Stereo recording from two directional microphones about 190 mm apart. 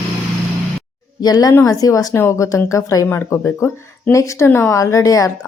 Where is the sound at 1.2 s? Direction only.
20° left (ahead or behind).